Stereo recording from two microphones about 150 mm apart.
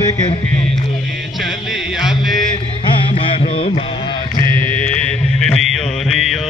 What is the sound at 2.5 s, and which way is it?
Music, 35° left (ahead or behind).